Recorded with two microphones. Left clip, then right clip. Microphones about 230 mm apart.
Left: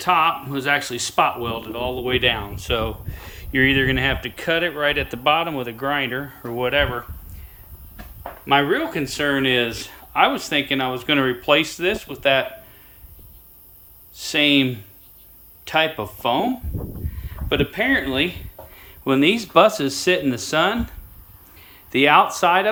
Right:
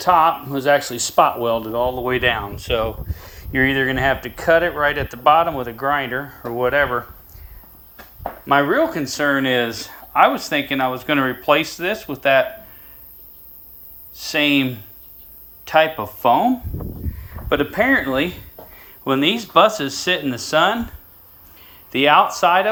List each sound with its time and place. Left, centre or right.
0.0 s speech: centre
8.4 s speech: centre
14.2 s speech: centre
17.5 s speech: centre
18.9 s a sound: centre
19.8 s speech: left
21.8 s speech: centre